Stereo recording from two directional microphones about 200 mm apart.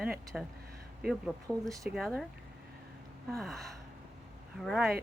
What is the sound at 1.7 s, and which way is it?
Speech, 15° right (ahead or behind).